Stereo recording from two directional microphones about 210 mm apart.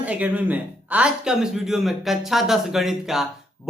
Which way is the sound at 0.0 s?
5° right (ahead or behind).